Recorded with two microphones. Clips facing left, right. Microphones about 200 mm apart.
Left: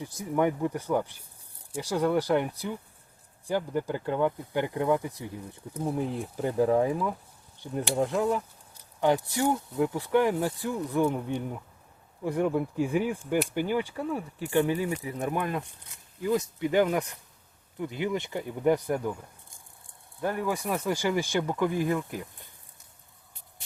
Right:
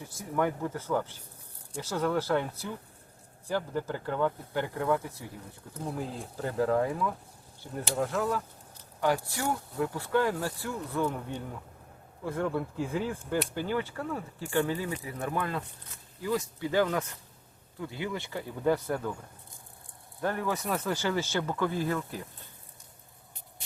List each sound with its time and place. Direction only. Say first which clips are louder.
0.0 s speech: left 4 dB; 15° left (ahead or behind)
20.2 s speech: left 2 dB; 15° left (ahead or behind)